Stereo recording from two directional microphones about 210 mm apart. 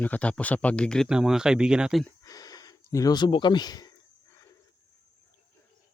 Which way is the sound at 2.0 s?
15° left (ahead or behind).